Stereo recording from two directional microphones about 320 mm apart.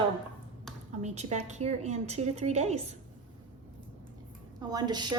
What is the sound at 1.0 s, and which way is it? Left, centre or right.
A woman's voice, right.